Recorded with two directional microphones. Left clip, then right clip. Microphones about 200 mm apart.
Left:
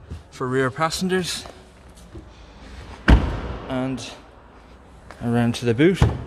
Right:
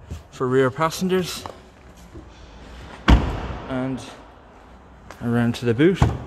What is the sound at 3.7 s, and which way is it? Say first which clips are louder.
Music: left 1 dB; 5° left (ahead or behind).